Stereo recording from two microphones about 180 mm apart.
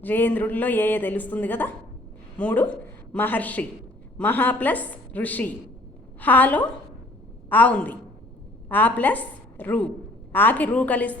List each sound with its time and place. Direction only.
0.0 s a woman's voice: 10° left (ahead or behind)